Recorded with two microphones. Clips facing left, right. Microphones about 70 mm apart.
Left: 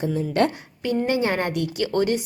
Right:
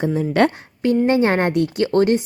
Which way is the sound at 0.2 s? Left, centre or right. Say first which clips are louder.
Right 4 dB; right.